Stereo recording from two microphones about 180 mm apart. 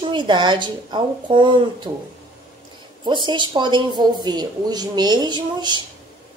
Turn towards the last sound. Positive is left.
turn(degrees=-25)  # may be behind; listen again after turning